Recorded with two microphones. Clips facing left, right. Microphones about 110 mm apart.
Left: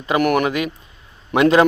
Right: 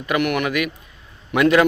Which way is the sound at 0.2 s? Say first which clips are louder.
Left 4 dB; 40° left (ahead or behind).